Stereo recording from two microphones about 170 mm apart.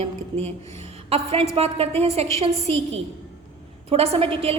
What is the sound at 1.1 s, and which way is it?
A woman's voice, 35° right (ahead or behind).